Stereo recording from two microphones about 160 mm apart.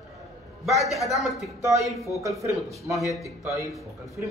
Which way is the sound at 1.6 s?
20° right (ahead or behind).